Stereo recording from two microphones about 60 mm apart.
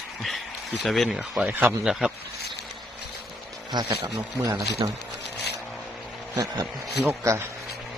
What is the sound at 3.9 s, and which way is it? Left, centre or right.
Speech, right.